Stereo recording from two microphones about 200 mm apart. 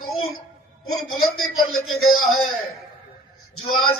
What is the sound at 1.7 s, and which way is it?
Speech, 90° left.